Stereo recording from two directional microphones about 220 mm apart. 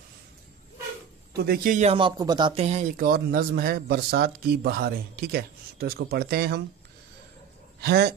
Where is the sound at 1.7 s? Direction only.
25° right (ahead or behind); by 6.6 s 45° right (ahead or behind).